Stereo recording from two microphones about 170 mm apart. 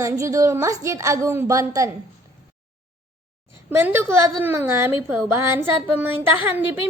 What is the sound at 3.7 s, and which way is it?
Child singing, 15° right (ahead or behind).